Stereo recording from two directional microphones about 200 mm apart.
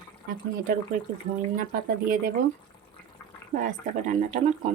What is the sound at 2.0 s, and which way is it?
Speech, 45° right (ahead or behind).